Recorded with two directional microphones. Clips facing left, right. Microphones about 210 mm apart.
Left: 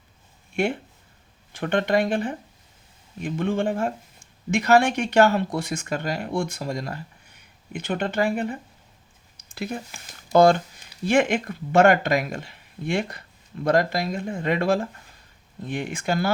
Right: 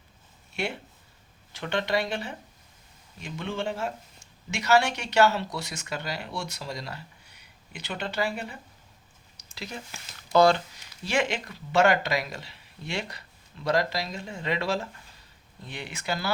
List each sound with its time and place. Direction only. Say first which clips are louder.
0.5 s speech: left 8 dB; 50° left (ahead or behind)
9.4 s a sound: left 8 dB; 50° left (ahead or behind)
10.3 s speech: left 4 dB; 50° left (ahead or behind)